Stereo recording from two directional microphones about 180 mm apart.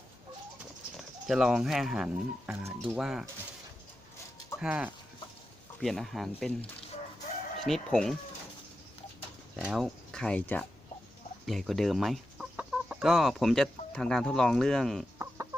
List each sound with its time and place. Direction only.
1.3 s speech: 5° right (ahead or behind)
4.6 s speech: 5° right (ahead or behind)
7.6 s speech: centre (ahead or behind)
9.6 s speech: 5° right (ahead or behind)